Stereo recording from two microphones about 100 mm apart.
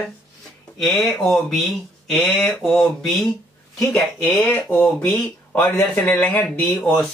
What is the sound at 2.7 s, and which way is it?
Speech, 5° left (ahead or behind).